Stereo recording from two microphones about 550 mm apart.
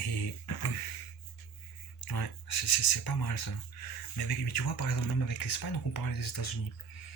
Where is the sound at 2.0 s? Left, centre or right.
Left.